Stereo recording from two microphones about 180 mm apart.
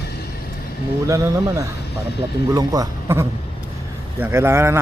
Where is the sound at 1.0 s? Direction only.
15° right (ahead or behind).